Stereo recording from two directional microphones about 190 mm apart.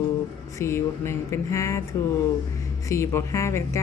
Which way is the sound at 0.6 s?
15° left (ahead or behind).